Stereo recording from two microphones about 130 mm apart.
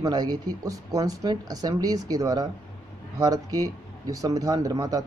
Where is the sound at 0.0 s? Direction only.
30° right (ahead or behind).